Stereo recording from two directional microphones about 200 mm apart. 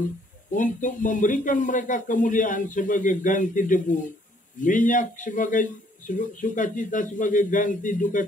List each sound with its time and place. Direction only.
0.0 s speech: 40° left (ahead or behind)